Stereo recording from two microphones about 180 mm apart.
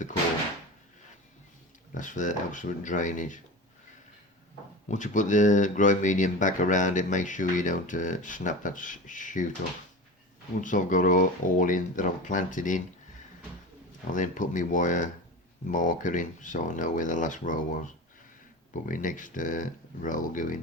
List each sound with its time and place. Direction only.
1.9 s speech: 45° left (ahead or behind)
4.9 s speech: 45° left (ahead or behind)
10.6 s speech: 45° left (ahead or behind)
14.1 s speech: 45° left (ahead or behind)